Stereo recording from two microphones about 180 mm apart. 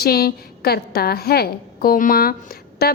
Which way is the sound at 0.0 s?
60° left (ahead or behind).